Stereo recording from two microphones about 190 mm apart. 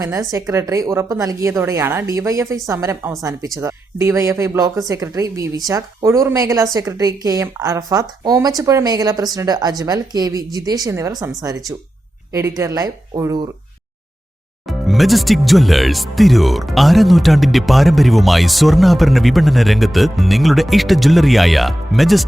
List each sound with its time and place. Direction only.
0.0 s speech: 15° right (ahead or behind)
12.3 s speech: 15° right (ahead or behind)
14.7 s speech: centre (ahead or behind)